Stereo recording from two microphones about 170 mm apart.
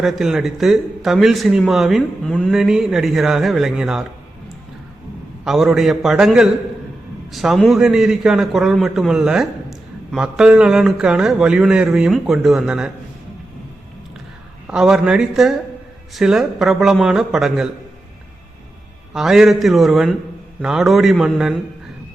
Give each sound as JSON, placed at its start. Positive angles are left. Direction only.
{"t": 0.0, "sound": "a man's voice", "side_deg": -5}
{"t": 5.5, "sound": "a man's voice", "side_deg": 0}
{"t": 14.7, "sound": "a man's voice", "side_deg": -5}
{"t": 19.1, "sound": "a man's voice", "side_deg": 0}